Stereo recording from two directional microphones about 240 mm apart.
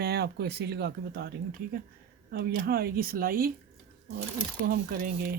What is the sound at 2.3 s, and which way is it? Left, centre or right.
Speech, right.